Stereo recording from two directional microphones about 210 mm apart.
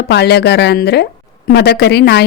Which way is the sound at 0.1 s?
50° left (ahead or behind).